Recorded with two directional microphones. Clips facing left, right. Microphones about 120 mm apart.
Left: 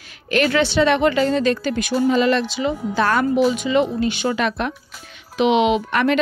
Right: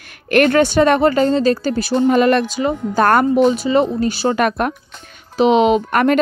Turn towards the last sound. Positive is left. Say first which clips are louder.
# right 4 dB
turn(degrees=-45)  # may be behind; listen again after turning